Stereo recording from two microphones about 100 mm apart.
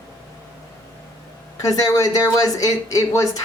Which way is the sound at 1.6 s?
35° left (ahead or behind).